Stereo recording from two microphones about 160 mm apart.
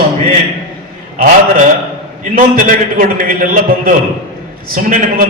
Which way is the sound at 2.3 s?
60° right (ahead or behind).